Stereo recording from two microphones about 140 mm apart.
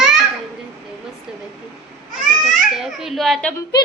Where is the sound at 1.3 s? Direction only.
5° right (ahead or behind).